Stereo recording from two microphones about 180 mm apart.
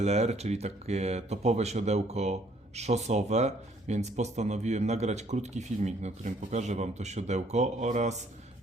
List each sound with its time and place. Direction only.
0.0 s speech: 40° right (ahead or behind)